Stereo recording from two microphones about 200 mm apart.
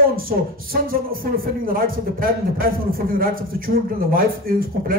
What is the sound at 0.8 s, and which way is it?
Speech, 45° right (ahead or behind).